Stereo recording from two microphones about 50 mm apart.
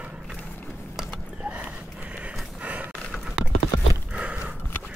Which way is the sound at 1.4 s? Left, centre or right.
Right.